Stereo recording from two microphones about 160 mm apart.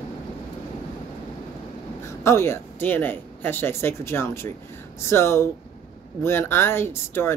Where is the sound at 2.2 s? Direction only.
15° left (ahead or behind).